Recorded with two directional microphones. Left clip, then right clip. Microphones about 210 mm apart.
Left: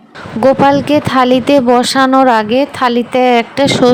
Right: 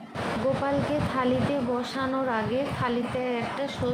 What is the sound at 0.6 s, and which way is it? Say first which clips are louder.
A woman's voice: left 17 dB; 50° left (ahead or behind).